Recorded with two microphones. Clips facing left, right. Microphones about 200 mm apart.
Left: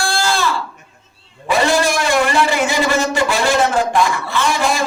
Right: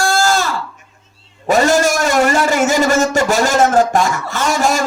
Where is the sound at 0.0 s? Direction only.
45° right (ahead or behind).